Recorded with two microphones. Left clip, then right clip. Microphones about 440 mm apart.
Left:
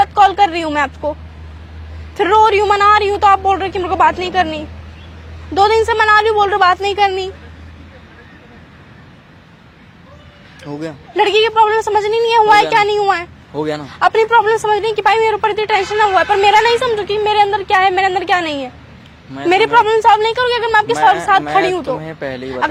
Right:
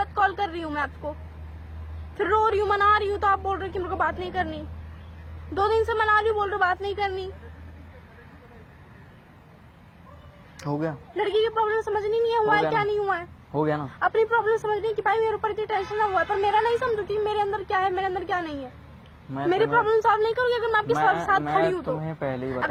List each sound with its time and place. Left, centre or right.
0.0 s speech: left
2.1 s speech: left
5.5 s speech: left
10.6 s speech: right
11.2 s speech: left
13.5 s speech: right
14.0 s speech: left
22.0 s speech: centre